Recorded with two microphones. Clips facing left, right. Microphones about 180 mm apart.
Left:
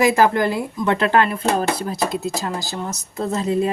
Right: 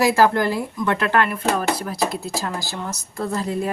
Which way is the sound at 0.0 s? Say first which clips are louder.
Left 1 dB; 20° left (ahead or behind).